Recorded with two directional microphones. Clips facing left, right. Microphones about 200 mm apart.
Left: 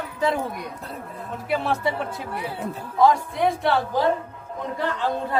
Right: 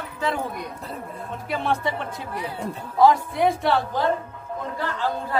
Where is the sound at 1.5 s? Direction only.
5° left (ahead or behind).